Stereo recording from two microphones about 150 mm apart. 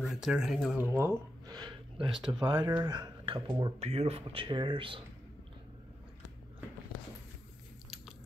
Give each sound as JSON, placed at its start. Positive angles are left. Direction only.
{"t": 0.0, "sound": "speech", "side_deg": 0}
{"t": 0.7, "sound": "speech", "side_deg": -15}
{"t": 3.8, "sound": "speech", "side_deg": -45}